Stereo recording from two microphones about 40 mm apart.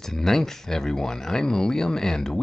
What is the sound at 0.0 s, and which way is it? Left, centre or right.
Speech, centre.